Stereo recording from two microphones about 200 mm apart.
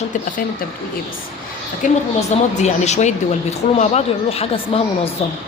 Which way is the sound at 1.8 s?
40° left (ahead or behind).